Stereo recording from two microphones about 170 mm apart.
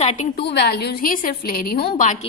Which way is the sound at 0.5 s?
75° left (ahead or behind).